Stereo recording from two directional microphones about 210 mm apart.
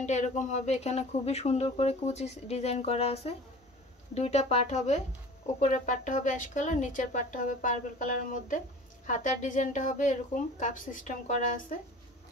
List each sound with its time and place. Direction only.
0.0 s speech: 35° left (ahead or behind)